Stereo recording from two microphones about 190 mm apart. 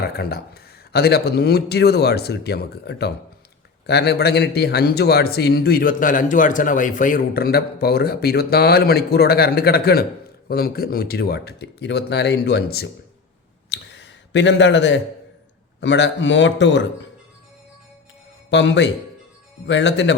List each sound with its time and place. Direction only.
0.1 s a man's voice: 55° left (ahead or behind)
13.7 s a sound: 65° left (ahead or behind)
15.8 s a man's voice: 70° left (ahead or behind)
18.5 s a man's voice: 65° left (ahead or behind)